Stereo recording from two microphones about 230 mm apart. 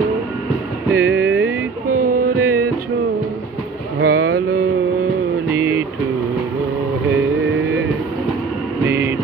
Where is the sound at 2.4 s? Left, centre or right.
Right.